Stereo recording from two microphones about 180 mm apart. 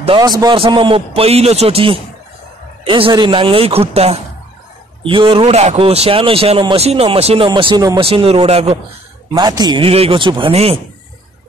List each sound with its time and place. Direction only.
0.0 s speech: 25° right (ahead or behind)
9.3 s a man's voice: 20° right (ahead or behind)